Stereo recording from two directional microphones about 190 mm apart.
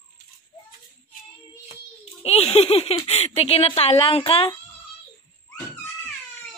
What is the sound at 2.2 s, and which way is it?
Speech, 35° left (ahead or behind).